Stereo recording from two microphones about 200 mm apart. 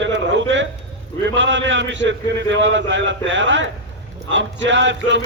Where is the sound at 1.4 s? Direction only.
65° right (ahead or behind).